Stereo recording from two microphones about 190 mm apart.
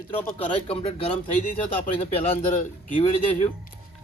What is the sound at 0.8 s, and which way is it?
Speech, 30° left (ahead or behind).